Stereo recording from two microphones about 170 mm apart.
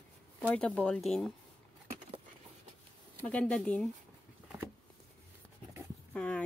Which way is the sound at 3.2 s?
5° left (ahead or behind).